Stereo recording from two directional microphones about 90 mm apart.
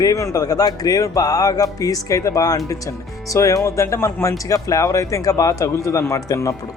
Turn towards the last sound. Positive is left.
turn(degrees=35)  # may be behind; listen again after turning